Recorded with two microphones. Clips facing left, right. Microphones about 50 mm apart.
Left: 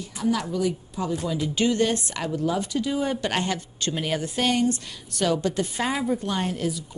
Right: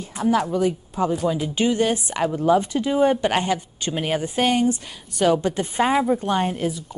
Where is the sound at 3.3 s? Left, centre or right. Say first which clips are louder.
Right 5 dB; centre.